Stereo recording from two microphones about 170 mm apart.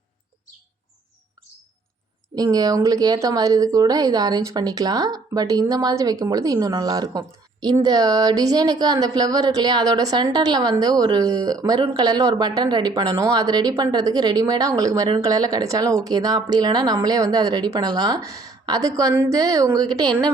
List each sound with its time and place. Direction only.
2.3 s speech: 20° right (ahead or behind)